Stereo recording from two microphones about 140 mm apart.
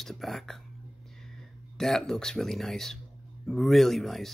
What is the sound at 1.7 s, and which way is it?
Speech, 5° left (ahead or behind).